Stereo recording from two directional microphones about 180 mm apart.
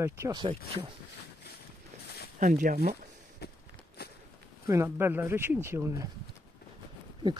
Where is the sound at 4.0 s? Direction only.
60° left (ahead or behind).